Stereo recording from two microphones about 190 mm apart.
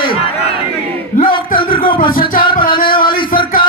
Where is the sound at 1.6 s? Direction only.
25° left (ahead or behind).